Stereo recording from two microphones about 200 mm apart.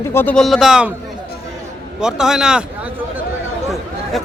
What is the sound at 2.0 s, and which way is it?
Speech, 5° right (ahead or behind).